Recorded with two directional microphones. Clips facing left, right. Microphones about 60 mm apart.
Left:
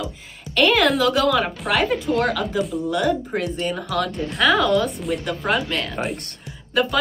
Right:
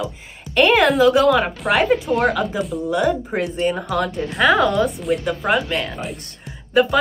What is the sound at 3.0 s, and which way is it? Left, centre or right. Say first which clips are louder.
A woman's voice: right 2 dB; centre.